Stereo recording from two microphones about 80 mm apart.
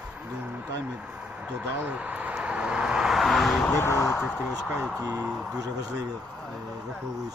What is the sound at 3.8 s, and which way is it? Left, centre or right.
Speech, left.